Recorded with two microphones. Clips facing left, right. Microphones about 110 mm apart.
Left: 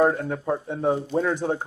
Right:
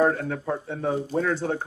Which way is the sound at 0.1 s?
20° left (ahead or behind).